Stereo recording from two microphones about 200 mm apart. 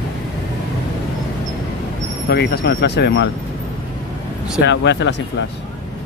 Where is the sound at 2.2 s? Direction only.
55° left (ahead or behind).